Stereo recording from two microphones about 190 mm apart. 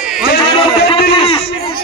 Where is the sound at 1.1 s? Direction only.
30° left (ahead or behind).